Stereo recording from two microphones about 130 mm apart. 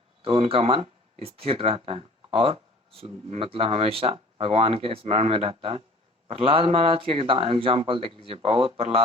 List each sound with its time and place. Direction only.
0.2 s speech: 45° right (ahead or behind)